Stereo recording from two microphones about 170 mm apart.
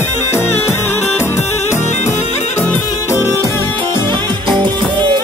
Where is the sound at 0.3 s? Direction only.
15° left (ahead or behind).